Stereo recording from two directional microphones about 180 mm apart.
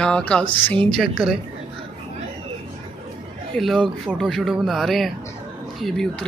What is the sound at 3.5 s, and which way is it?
Speech, centre (ahead or behind).